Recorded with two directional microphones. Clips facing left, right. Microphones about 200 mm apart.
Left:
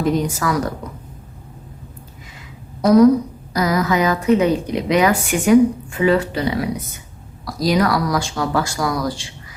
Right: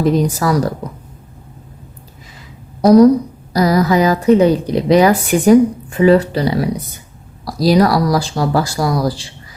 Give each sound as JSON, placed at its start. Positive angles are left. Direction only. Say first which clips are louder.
{"t": 0.0, "sound": "a woman's voice", "louder": "right 4 dB", "side_deg": -35}
{"t": 2.8, "sound": "a woman's voice", "louder": "right 3 dB", "side_deg": -35}